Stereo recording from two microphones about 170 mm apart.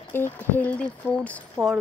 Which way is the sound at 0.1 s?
10° left (ahead or behind).